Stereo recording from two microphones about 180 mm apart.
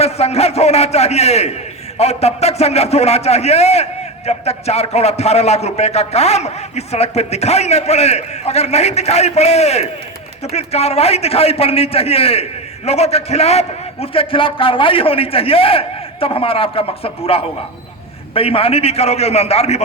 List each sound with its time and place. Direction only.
0.0 s a man's voice: 35° left (ahead or behind)